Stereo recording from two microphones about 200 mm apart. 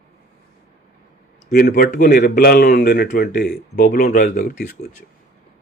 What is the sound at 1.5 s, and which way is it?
Speech, 50° left (ahead or behind).